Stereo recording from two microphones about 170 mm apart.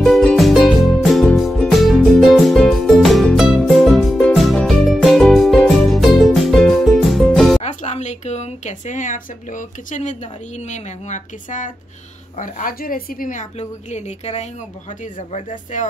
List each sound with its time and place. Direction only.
0.0 s music: 5° left (ahead or behind)
7.6 s a woman's voice: 40° left (ahead or behind)